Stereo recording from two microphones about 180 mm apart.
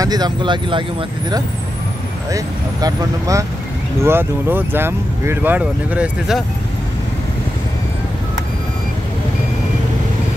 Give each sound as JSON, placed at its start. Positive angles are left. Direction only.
{"t": 0.0, "sound": "speech", "side_deg": -20}
{"t": 2.3, "sound": "speech", "side_deg": -20}